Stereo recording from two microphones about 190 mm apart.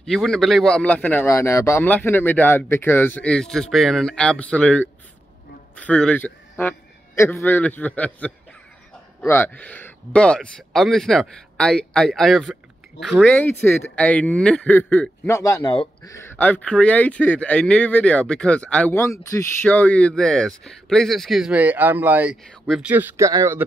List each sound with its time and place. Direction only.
0.0 s a man's voice: centre (ahead or behind)
9.3 s a man's voice: 10° left (ahead or behind)
15.6 s speech: 25° left (ahead or behind)
16.1 s speech: 15° left (ahead or behind)
22.8 s speech: 10° right (ahead or behind)